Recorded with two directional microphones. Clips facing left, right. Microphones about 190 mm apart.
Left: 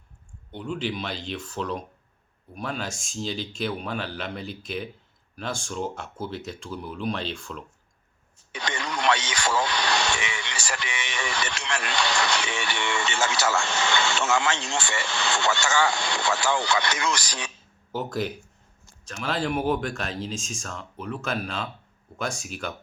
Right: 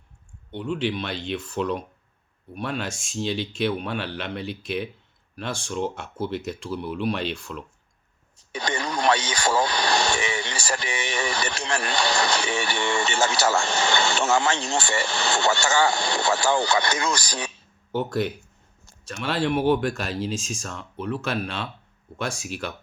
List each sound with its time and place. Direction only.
0.5 s speech: centre (ahead or behind)
8.5 s speech: 35° right (ahead or behind)
17.9 s speech: centre (ahead or behind)